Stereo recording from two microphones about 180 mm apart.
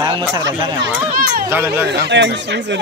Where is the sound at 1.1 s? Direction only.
55° right (ahead or behind).